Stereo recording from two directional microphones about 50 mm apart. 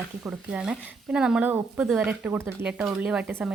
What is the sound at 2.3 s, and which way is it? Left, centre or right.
Speech, right.